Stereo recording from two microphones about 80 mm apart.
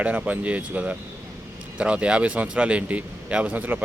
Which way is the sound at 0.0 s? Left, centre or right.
Centre.